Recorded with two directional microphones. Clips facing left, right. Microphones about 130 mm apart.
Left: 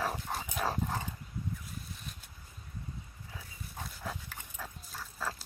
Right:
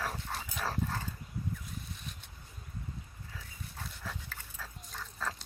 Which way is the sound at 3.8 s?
15° left (ahead or behind).